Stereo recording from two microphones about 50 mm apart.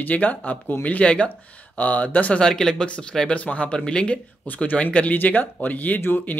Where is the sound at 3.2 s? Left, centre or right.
Left.